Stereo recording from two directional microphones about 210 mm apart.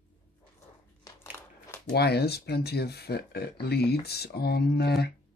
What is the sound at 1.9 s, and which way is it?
Speech, 50° left (ahead or behind).